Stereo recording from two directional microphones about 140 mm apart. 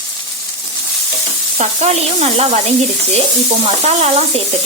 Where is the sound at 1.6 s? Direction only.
50° right (ahead or behind).